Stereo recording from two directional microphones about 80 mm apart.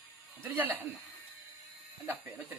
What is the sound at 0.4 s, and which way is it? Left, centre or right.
Speech, right.